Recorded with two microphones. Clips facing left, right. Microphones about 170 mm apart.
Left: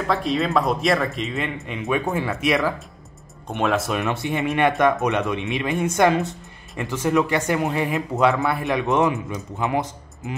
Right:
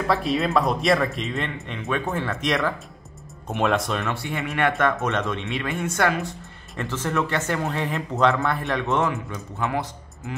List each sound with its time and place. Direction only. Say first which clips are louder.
0.0 s speech: even; centre (ahead or behind)
1.8 s speech: left 3 dB; 15° left (ahead or behind)
4.0 s speech: left 5 dB; 20° left (ahead or behind)